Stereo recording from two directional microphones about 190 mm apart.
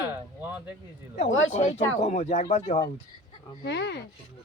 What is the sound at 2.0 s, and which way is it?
Speech, 35° left (ahead or behind).